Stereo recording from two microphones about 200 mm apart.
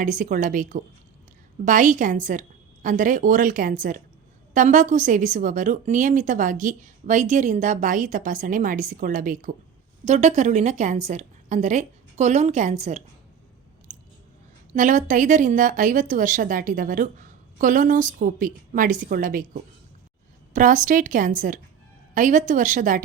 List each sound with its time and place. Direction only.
0.0 s a woman's voice: 40° right (ahead or behind)
13.9 s chewing: 40° right (ahead or behind)
14.7 s a woman's voice: 40° right (ahead or behind)
20.5 s a woman's voice: 40° right (ahead or behind)